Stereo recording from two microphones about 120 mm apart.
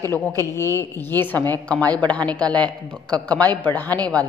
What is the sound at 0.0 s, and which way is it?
A man's voice, 20° left (ahead or behind).